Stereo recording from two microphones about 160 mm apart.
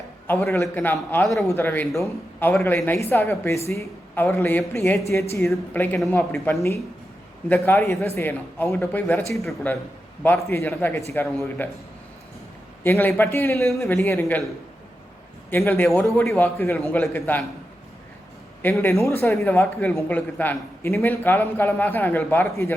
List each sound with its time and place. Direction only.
0.4 s a man's voice: 15° left (ahead or behind)
12.8 s a man's voice: 15° left (ahead or behind)
15.4 s a man's voice: 15° left (ahead or behind)
16.1 s a man's voice: centre (ahead or behind)
16.4 s a man's voice: 15° left (ahead or behind)
18.6 s a man's voice: 15° left (ahead or behind)